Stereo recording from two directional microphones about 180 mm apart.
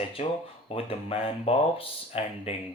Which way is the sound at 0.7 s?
30° left (ahead or behind).